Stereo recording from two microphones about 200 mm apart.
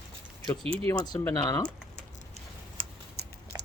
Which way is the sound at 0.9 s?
20° left (ahead or behind).